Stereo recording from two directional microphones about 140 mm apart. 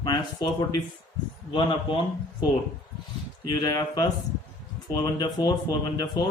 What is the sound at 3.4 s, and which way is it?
Speech, 30° left (ahead or behind).